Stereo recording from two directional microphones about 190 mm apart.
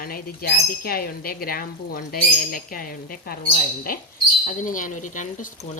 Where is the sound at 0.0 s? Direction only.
50° left (ahead or behind).